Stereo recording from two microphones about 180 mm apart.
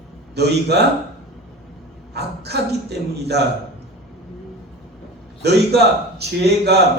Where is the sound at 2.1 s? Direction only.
65° right (ahead or behind).